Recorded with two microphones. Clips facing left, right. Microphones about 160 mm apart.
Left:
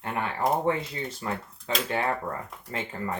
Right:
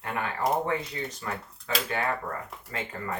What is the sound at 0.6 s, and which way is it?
Speech, 25° left (ahead or behind).